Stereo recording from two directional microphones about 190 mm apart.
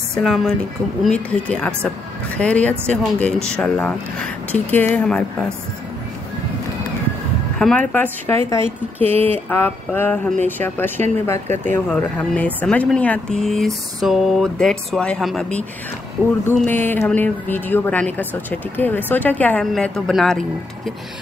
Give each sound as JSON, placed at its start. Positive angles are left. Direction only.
{"t": 0.1, "sound": "speech", "side_deg": 0}
{"t": 7.5, "sound": "speech", "side_deg": 5}
{"t": 9.0, "sound": "speech", "side_deg": -30}
{"t": 9.5, "sound": "speech", "side_deg": 10}